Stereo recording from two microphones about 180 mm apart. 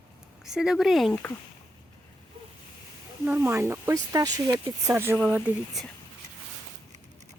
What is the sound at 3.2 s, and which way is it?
Speech, 10° right (ahead or behind).